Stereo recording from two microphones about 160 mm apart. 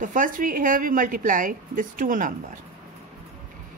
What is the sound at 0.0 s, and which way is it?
A woman's voice, 55° right (ahead or behind).